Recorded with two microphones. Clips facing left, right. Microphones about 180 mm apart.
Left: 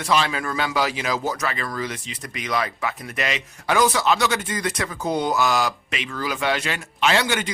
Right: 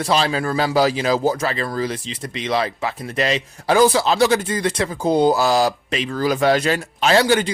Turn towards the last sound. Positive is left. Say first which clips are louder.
# right 6 dB
turn(degrees=-35)  # may be behind; listen again after turning